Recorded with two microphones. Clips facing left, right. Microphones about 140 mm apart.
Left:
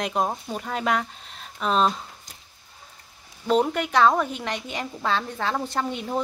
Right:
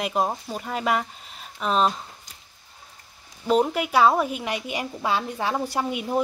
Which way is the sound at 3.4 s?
5° right (ahead or behind).